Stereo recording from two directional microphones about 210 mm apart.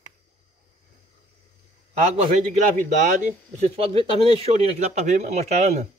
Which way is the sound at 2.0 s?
35° right (ahead or behind).